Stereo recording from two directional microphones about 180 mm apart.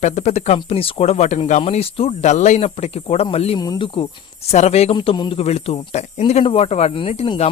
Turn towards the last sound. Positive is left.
turn(degrees=35)  # may be behind; listen again after turning